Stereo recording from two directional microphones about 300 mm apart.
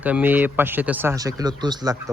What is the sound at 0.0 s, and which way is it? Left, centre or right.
Speech, centre.